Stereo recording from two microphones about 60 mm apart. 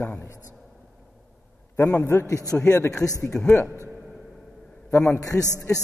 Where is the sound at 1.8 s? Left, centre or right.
Left.